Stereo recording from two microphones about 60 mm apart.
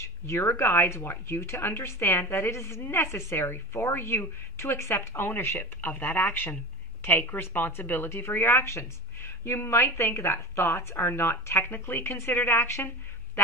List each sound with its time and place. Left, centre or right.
0.0 s a woman's voice: left